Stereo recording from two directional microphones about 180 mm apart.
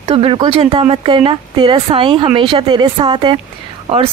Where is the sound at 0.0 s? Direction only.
30° right (ahead or behind).